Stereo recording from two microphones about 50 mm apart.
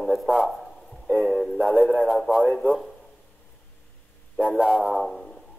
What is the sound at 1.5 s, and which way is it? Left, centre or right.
Radio, left.